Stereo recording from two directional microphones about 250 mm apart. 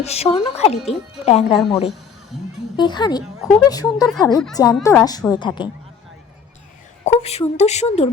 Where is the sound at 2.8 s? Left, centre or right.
Centre.